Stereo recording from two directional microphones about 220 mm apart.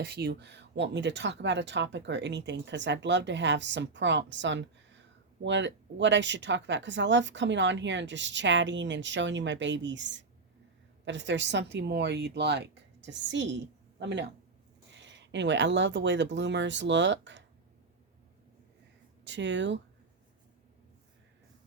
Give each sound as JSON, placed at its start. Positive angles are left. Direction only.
{"t": 0.0, "sound": "speech", "side_deg": -45}
{"t": 19.2, "sound": "speech", "side_deg": -55}